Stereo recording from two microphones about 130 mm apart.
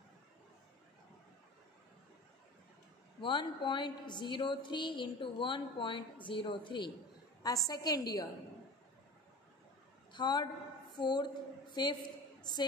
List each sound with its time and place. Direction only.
3.2 s a woman's voice: 40° left (ahead or behind)
7.4 s a woman's voice: 30° left (ahead or behind)
10.1 s a woman's voice: 35° left (ahead or behind)